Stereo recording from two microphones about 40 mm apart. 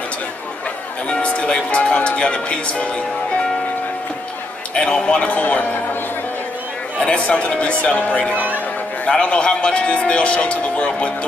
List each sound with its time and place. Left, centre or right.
1.0 s music: left
4.7 s speech: left
7.0 s a man's voice: left